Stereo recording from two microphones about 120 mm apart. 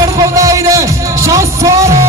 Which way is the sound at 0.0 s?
25° right (ahead or behind).